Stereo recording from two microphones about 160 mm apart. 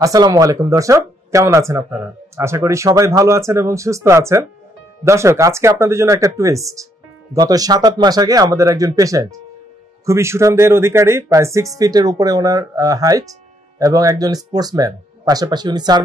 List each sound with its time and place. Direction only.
0.0 s speech: 25° right (ahead or behind)